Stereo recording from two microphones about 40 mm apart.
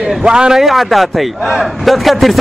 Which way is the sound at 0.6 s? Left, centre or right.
Centre.